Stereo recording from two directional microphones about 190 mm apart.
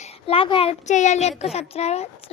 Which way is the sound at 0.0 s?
30° left (ahead or behind).